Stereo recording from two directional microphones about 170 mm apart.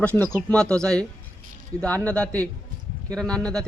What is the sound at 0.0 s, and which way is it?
Speech, 10° left (ahead or behind).